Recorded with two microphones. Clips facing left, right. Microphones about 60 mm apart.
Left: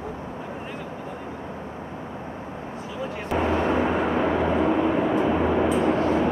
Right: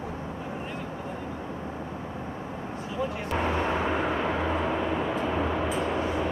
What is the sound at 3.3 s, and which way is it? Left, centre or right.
Vehicle, centre.